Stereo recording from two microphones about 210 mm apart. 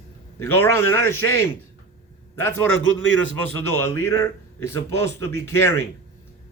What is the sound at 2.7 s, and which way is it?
Speech, 65° left (ahead or behind).